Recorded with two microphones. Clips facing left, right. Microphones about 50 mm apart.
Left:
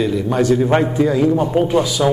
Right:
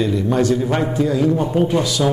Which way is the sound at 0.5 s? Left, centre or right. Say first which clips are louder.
Left 4 dB; left.